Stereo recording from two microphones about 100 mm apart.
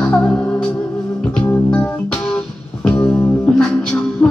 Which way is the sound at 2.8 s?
10° left (ahead or behind).